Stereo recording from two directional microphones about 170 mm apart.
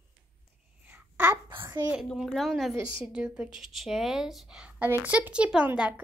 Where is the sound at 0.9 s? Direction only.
10° right (ahead or behind).